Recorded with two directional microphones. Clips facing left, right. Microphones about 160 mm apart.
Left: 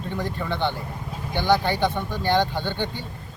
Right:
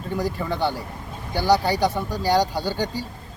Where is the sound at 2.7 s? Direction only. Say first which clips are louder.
Right 2 dB; 40° right (ahead or behind).